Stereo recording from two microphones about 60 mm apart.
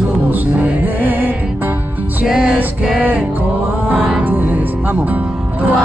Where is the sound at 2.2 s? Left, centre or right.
Centre.